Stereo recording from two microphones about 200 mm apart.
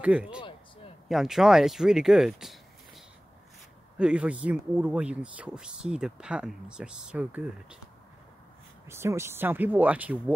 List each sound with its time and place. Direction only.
0.0 s speech: 5° right (ahead or behind)
0.4 s a sound: 25° left (ahead or behind)
1.0 s speech: centre (ahead or behind)
4.0 s speech: 5° right (ahead or behind)
8.8 s speech: 15° right (ahead or behind)